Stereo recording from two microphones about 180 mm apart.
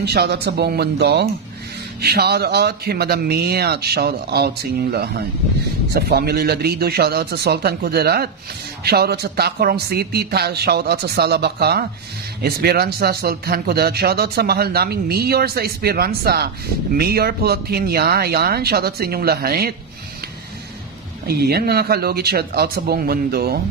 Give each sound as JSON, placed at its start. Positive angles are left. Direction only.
{"t": 0.0, "sound": "speech", "side_deg": -65}
{"t": 21.3, "sound": "speech", "side_deg": -60}